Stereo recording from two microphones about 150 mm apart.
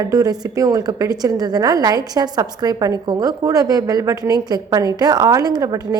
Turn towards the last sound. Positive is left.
turn(degrees=-20)  # may be behind; listen again after turning